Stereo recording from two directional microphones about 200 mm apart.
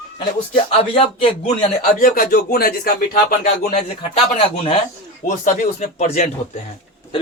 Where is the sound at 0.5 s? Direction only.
30° left (ahead or behind).